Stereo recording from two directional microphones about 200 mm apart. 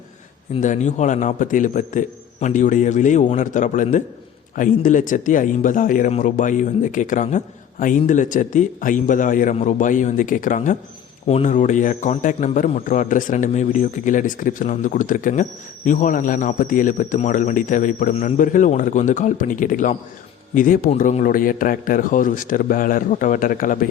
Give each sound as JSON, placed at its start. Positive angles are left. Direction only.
{"t": 0.6, "sound": "a man's voice", "side_deg": 35}